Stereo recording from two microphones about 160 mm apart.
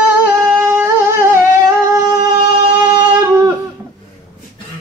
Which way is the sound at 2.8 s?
25° right (ahead or behind).